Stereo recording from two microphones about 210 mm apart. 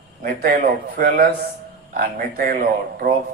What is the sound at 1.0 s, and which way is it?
A man's voice, 40° right (ahead or behind).